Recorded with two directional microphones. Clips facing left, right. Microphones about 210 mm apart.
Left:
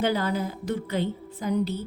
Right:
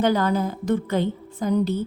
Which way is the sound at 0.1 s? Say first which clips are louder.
Right 5 dB; 50° right (ahead or behind).